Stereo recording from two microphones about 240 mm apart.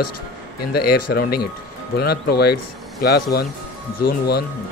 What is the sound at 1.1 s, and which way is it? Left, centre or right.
Speech, left.